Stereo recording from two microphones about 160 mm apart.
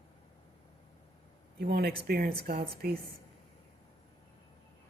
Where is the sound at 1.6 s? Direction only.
80° right.